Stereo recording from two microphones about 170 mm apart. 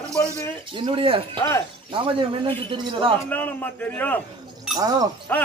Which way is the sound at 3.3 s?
10° left (ahead or behind).